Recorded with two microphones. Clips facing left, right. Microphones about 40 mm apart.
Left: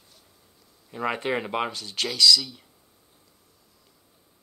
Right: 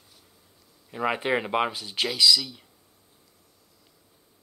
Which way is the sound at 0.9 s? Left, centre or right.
Centre.